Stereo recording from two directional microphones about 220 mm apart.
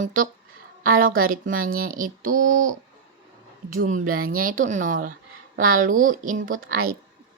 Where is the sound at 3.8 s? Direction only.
40° right (ahead or behind).